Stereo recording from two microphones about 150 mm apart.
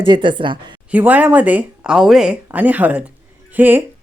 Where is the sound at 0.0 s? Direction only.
35° right (ahead or behind).